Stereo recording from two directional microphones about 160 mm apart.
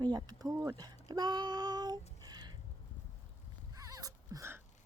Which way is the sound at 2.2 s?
25° right (ahead or behind).